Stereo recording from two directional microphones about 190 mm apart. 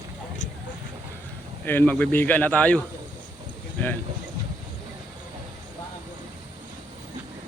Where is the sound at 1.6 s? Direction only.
10° left (ahead or behind).